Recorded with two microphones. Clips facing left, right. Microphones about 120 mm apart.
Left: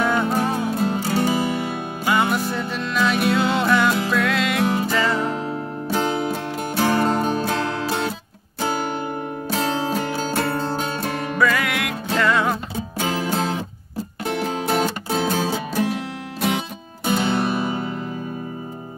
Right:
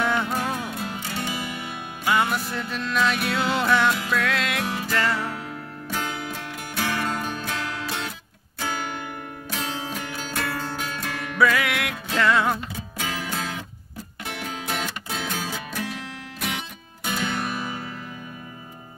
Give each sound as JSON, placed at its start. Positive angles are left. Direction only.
{"t": 0.1, "sound": "music", "side_deg": 30}
{"t": 2.0, "sound": "music", "side_deg": 0}
{"t": 4.6, "sound": "music", "side_deg": 30}
{"t": 11.3, "sound": "music", "side_deg": 0}
{"t": 12.7, "sound": "music", "side_deg": 30}